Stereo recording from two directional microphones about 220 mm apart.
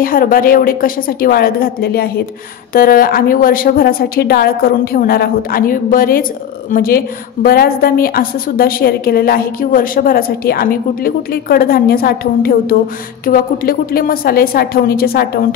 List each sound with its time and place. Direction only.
0.0 s a woman's voice: 40° left (ahead or behind)